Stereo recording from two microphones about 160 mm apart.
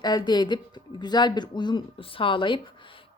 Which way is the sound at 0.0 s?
25° left (ahead or behind).